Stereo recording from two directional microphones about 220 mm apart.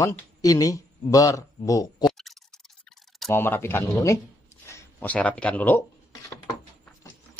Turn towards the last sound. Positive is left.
turn(degrees=15)  # may be behind; listen again after turning